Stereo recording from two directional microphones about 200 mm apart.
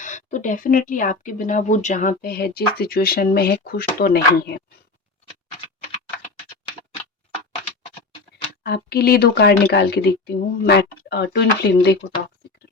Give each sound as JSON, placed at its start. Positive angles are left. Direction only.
{"t": 0.0, "sound": "speech", "side_deg": 40}
{"t": 8.6, "sound": "speech", "side_deg": 50}